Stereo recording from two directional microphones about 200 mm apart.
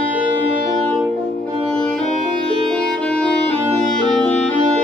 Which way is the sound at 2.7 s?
5° left (ahead or behind).